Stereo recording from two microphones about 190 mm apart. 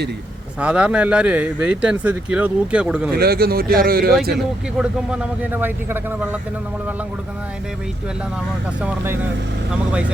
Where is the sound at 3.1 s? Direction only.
55° right (ahead or behind).